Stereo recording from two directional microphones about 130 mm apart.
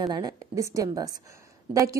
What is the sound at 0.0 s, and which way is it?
A woman's voice, 30° right (ahead or behind).